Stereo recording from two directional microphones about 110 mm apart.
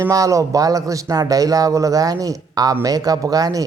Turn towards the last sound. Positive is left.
turn(degrees=-35)  # may be behind; listen again after turning